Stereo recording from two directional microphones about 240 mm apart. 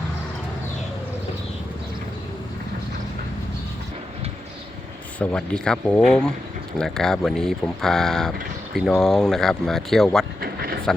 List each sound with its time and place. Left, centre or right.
5.2 s speech: centre
10.4 s vehicle: right